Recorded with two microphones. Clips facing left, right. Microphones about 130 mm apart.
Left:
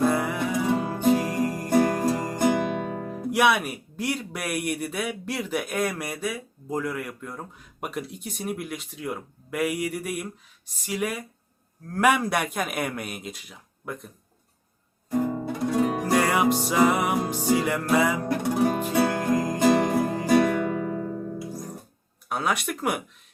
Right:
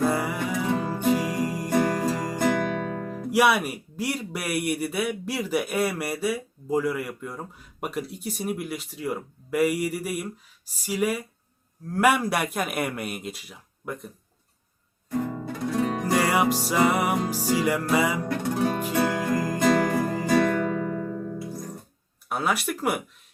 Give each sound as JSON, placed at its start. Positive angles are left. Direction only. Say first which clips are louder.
{"t": 0.0, "sound": "music", "louder": "left 1 dB", "side_deg": -5}
{"t": 0.5, "sound": "music", "louder": "left 2 dB", "side_deg": 10}
{"t": 1.1, "sound": "music", "louder": "left 1 dB", "side_deg": -10}
{"t": 1.7, "sound": "music", "louder": "left 2 dB", "side_deg": 10}
{"t": 3.1, "sound": "speech", "louder": "right 1 dB", "side_deg": 0}
{"t": 15.1, "sound": "guitar", "louder": "left 3 dB", "side_deg": 10}
{"t": 16.1, "sound": "music", "louder": "left 1 dB", "side_deg": -5}
{"t": 16.6, "sound": "speech", "louder": "left 1 dB", "side_deg": 0}
{"t": 17.2, "sound": "music", "louder": "even", "side_deg": -10}
{"t": 18.3, "sound": "music", "louder": "left 2 dB", "side_deg": 15}
{"t": 20.0, "sound": "music", "louder": "left 1 dB", "side_deg": 5}
{"t": 20.5, "sound": "music", "louder": "even", "side_deg": 15}
{"t": 22.3, "sound": "speech", "louder": "right 1 dB", "side_deg": -5}